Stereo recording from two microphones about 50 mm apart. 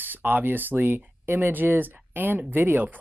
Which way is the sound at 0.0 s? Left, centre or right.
Right.